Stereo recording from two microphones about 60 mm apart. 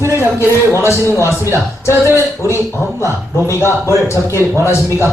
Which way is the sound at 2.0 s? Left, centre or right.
Right.